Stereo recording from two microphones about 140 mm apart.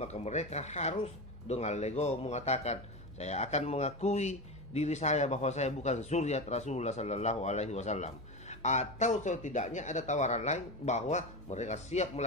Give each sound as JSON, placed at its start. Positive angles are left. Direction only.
{"t": 0.0, "sound": "speech", "side_deg": 50}